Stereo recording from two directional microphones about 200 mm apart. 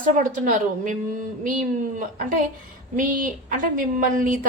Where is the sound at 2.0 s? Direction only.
40° right (ahead or behind).